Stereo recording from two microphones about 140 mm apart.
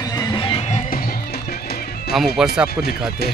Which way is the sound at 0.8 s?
90° left.